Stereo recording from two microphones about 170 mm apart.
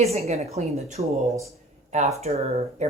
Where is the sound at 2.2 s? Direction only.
40° right (ahead or behind).